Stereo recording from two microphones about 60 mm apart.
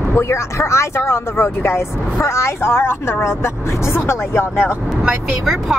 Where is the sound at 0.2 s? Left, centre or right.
Left.